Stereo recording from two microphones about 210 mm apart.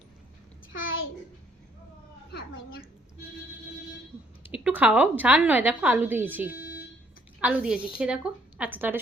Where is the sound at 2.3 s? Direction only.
50° left (ahead or behind).